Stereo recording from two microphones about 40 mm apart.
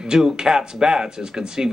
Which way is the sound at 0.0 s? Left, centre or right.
Centre.